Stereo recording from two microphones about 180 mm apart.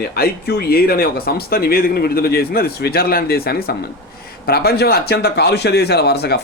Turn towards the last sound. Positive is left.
turn(degrees=65)  # may be behind; listen again after turning